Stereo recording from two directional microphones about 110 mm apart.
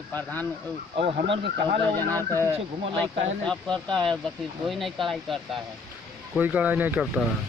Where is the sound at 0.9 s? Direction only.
60° right (ahead or behind).